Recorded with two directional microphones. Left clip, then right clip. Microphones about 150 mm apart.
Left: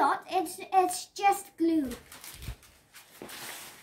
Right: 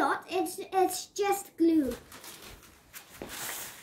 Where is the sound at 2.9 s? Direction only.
90° right.